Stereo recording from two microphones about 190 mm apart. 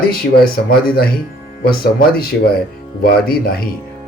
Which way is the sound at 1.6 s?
55° left (ahead or behind).